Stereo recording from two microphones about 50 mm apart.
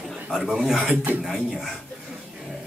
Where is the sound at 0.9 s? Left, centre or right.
Right.